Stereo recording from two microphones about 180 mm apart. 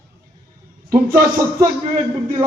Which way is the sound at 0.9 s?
50° right (ahead or behind).